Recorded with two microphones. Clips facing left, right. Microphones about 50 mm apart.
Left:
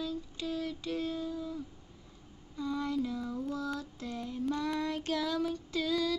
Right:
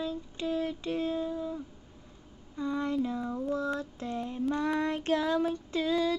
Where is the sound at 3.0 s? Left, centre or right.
Right.